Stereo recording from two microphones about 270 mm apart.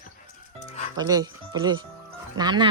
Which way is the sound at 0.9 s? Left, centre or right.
Centre.